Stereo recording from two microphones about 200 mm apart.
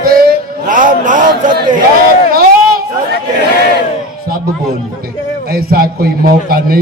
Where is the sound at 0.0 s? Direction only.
45° right (ahead or behind).